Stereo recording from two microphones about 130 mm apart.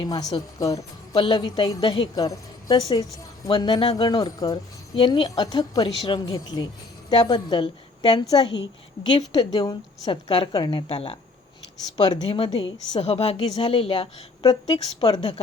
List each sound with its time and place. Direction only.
0.0 s speech: 30° left (ahead or behind)
1.1 s a woman's voice: 40° left (ahead or behind)
11.9 s a woman's voice: 30° left (ahead or behind)
13.0 s speech: 55° left (ahead or behind)
13.6 s a woman's voice: 45° left (ahead or behind)
15.0 s a woman's voice: 35° left (ahead or behind)